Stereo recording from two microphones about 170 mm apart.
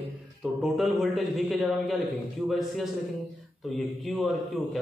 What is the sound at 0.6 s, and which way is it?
A man's voice, centre (ahead or behind).